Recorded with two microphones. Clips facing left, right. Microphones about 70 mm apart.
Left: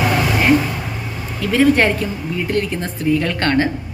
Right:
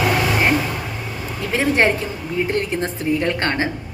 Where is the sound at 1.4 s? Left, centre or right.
Right.